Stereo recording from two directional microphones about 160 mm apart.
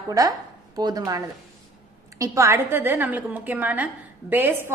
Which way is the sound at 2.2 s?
20° right (ahead or behind).